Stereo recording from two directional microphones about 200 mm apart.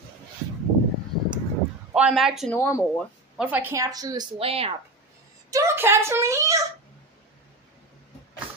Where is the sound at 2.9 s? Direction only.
5° right (ahead or behind); by 4.7 s 30° right (ahead or behind).